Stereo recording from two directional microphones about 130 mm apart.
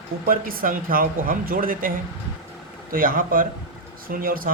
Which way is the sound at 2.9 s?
90° right.